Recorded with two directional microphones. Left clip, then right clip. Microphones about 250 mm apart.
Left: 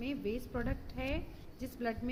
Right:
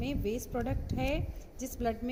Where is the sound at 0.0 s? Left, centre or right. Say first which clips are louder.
Right 3 dB; centre.